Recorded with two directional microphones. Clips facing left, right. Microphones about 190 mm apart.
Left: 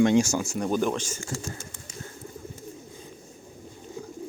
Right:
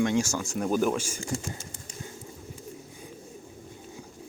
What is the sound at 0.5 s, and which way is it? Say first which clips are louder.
Speech: right 3 dB; 5° right (ahead or behind).